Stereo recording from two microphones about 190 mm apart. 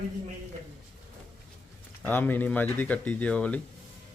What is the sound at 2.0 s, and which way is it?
Speech, 10° left (ahead or behind).